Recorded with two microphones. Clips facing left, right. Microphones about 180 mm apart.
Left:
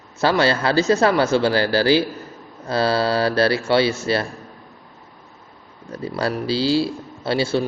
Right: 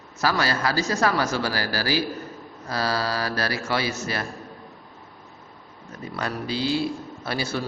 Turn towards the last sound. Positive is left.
turn(degrees=25)  # may be behind; listen again after turning